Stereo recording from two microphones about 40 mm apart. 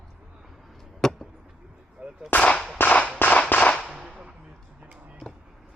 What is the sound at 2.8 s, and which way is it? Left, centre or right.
Whip, left.